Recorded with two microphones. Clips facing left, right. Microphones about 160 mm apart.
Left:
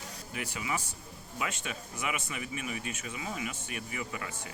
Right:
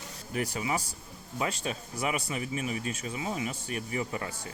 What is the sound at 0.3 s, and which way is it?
Speech, 40° right (ahead or behind).